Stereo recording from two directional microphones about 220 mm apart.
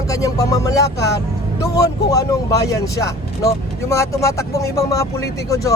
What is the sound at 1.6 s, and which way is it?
Speech, 15° left (ahead or behind).